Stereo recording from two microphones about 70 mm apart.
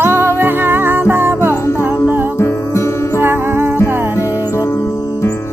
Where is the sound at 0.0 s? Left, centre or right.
Right.